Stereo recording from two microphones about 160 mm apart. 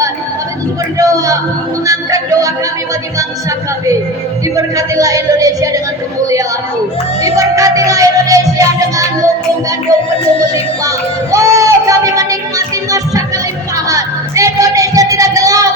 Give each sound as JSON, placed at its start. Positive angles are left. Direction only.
{"t": 0.9, "sound": "a sound", "side_deg": -20}
{"t": 1.9, "sound": "music", "side_deg": -20}
{"t": 4.5, "sound": "speech", "side_deg": -20}
{"t": 7.2, "sound": "music", "side_deg": -20}
{"t": 9.9, "sound": "speech", "side_deg": -20}
{"t": 10.5, "sound": "a sound", "side_deg": -20}
{"t": 13.7, "sound": "music", "side_deg": -20}